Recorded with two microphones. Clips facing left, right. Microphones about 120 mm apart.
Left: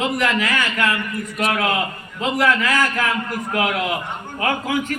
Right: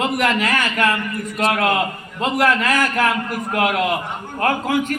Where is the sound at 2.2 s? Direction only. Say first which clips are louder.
Right 1 dB; 60° right (ahead or behind).